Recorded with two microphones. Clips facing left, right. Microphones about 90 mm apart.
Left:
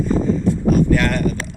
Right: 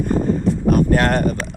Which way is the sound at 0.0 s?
55° right (ahead or behind).